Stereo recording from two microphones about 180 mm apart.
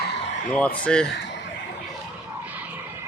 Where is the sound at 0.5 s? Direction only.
5° left (ahead or behind).